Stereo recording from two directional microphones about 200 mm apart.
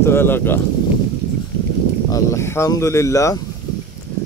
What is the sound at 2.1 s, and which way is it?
Speech, 15° left (ahead or behind).